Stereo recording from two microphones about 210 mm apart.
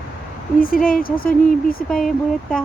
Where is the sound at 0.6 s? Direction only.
40° left (ahead or behind).